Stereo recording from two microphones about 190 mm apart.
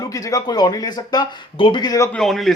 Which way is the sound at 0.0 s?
20° left (ahead or behind).